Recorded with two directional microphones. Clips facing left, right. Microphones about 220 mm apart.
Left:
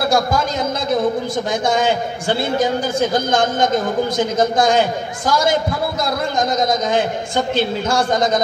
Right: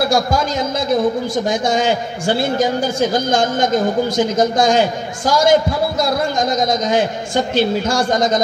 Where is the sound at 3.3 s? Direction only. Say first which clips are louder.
Right 1 dB; 55° left (ahead or behind).